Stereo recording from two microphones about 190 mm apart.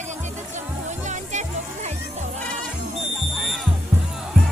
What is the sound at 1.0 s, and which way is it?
Music, 40° right (ahead or behind).